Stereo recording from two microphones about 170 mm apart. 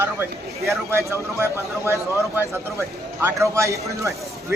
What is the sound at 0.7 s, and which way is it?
A man's voice, 15° right (ahead or behind).